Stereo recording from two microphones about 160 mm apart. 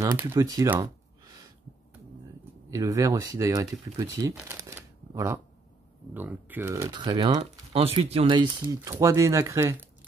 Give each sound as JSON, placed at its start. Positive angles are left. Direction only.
{"t": 0.0, "sound": "speech", "side_deg": -15}
{"t": 2.7, "sound": "speech", "side_deg": -20}
{"t": 7.7, "sound": "speech", "side_deg": -40}